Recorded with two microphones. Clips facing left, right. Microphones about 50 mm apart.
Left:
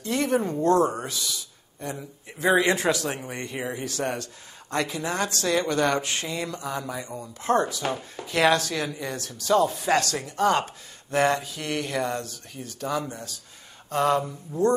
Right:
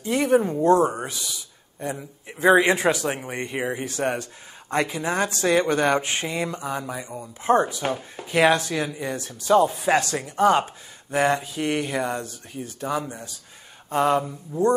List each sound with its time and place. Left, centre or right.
0.0 s a man's voice: centre